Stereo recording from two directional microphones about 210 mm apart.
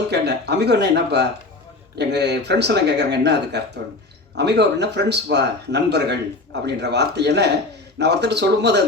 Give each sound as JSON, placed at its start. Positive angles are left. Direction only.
{"t": 0.1, "sound": "speech", "side_deg": -50}